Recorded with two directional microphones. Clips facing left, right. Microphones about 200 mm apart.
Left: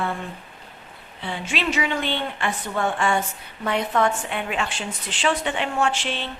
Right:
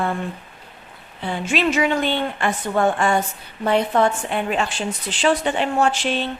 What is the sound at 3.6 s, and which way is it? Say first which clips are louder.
A woman's voice: right 4 dB; 30° right (ahead or behind).